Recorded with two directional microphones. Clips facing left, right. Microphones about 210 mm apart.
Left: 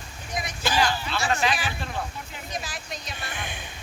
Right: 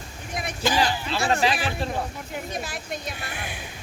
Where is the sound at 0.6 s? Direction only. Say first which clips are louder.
Right 2 dB; 15° right (ahead or behind).